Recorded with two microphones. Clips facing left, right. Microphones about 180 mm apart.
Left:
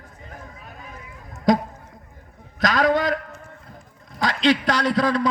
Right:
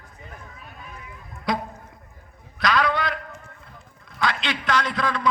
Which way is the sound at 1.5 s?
45° left (ahead or behind).